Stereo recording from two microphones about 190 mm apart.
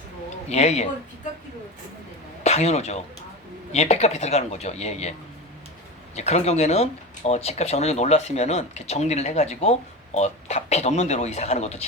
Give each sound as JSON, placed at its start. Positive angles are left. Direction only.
{"t": 0.5, "sound": "speech", "side_deg": 35}
{"t": 2.4, "sound": "speech", "side_deg": 35}
{"t": 6.1, "sound": "speech", "side_deg": 35}